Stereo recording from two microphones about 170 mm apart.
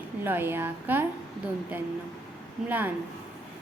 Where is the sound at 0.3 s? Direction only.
10° right (ahead or behind).